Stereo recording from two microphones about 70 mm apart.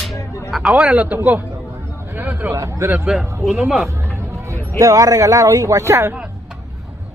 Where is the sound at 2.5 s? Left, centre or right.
Right.